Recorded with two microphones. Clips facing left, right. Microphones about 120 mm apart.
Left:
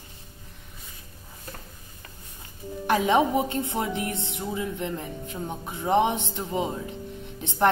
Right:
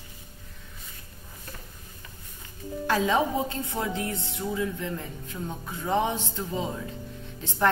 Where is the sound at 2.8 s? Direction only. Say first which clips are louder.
Left 3 dB; 20° left (ahead or behind).